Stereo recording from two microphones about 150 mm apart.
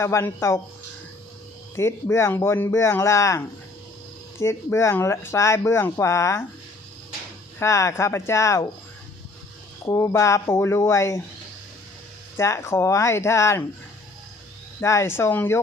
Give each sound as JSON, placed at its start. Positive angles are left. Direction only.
{"t": 0.0, "sound": "speech", "side_deg": 20}
{"t": 1.7, "sound": "speech", "side_deg": 20}
{"t": 7.6, "sound": "speech", "side_deg": 20}
{"t": 9.8, "sound": "speech", "side_deg": 20}
{"t": 12.4, "sound": "speech", "side_deg": 20}
{"t": 14.8, "sound": "speech", "side_deg": 20}